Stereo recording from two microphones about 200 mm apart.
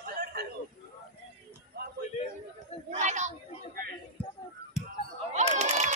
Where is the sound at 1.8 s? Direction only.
50° right (ahead or behind).